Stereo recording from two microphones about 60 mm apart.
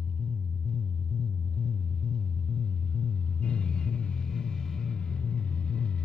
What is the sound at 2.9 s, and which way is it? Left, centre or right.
Vehicle, centre.